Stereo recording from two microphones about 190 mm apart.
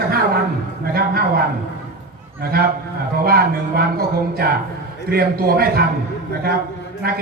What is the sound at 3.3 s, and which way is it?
Speech, 55° right (ahead or behind).